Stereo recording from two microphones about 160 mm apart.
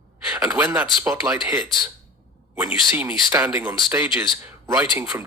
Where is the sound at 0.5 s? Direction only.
15° right (ahead or behind).